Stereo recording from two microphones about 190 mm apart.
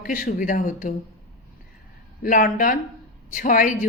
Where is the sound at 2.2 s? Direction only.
45° left (ahead or behind).